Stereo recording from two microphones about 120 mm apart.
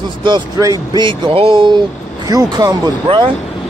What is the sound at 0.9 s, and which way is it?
Speech, 40° right (ahead or behind).